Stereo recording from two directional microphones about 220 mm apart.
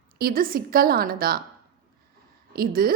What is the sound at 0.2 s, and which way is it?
A woman's voice, 40° right (ahead or behind).